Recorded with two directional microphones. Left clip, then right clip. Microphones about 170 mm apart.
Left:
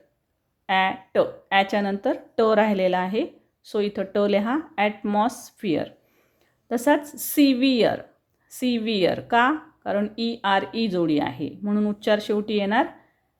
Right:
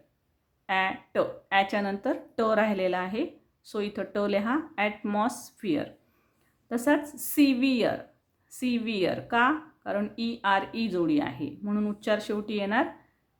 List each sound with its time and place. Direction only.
0.7 s a woman's voice: 25° left (ahead or behind)